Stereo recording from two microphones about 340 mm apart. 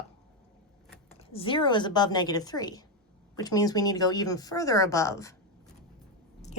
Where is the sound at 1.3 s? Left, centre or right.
Centre.